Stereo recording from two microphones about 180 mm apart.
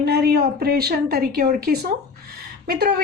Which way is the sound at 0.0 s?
60° right (ahead or behind).